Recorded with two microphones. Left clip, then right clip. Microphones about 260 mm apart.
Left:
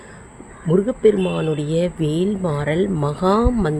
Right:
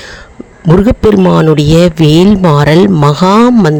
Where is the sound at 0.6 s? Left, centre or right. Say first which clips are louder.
Right 8 dB; right.